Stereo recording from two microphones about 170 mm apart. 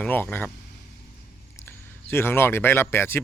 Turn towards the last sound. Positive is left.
turn(degrees=15)  # may be behind; listen again after turning